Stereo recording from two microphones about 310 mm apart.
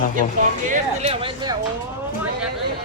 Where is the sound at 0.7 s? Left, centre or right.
Centre.